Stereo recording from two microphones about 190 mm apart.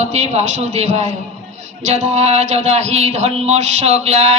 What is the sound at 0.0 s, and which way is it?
A man's voice, 35° right (ahead or behind).